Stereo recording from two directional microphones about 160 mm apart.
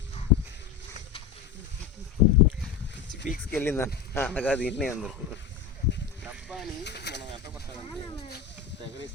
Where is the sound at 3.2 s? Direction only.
75° left (ahead or behind).